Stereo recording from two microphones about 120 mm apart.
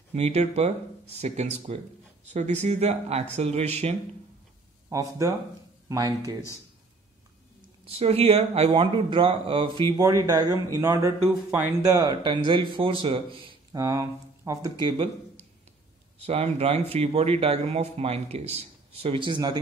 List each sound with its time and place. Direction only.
0.1 s speech: 65° right (ahead or behind)
4.8 s speech: 25° right (ahead or behind)
6.2 s speech: 25° left (ahead or behind)
7.8 s speech: 55° right (ahead or behind)
8.7 s speech: 45° right (ahead or behind)
10.0 s speech: 25° right (ahead or behind); by 13.6 s 45° right (ahead or behind)
13.7 s speech: 25° right (ahead or behind)
14.8 s speech: 40° right (ahead or behind)
16.3 s speech: 60° right (ahead or behind); by 19.6 s 40° right (ahead or behind)